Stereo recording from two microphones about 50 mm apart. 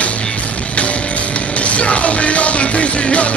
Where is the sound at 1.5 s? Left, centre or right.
Left.